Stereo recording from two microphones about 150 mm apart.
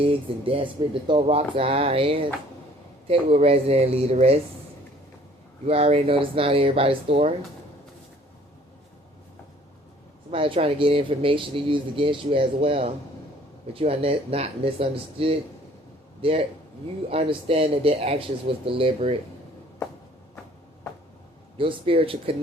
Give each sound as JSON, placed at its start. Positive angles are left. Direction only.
{"t": 0.0, "sound": "speech", "side_deg": -40}
{"t": 5.6, "sound": "speech", "side_deg": -40}
{"t": 10.3, "sound": "speech", "side_deg": -35}
{"t": 21.6, "sound": "speech", "side_deg": -35}